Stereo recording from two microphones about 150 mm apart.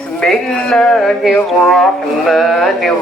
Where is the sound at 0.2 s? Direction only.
5° left (ahead or behind).